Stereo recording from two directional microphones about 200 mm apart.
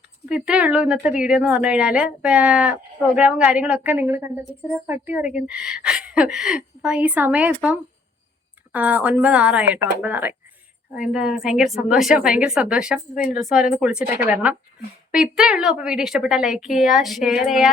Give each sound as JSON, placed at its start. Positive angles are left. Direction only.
{"t": 0.3, "sound": "a woman's voice", "side_deg": -5}
{"t": 8.7, "sound": "a woman's voice", "side_deg": -10}